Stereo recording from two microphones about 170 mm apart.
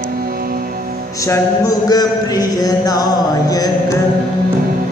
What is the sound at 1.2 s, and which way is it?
Speech, 20° left (ahead or behind).